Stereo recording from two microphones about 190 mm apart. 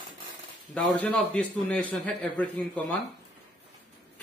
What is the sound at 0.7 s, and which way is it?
A man's voice, 5° left (ahead or behind).